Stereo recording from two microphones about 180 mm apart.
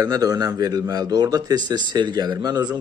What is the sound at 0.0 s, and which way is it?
A man's voice, 20° right (ahead or behind).